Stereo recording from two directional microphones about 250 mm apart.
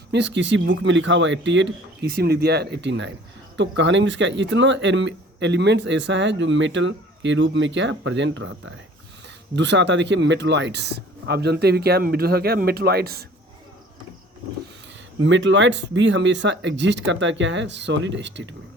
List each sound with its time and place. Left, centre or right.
0.1 s speech: right
15.2 s speech: right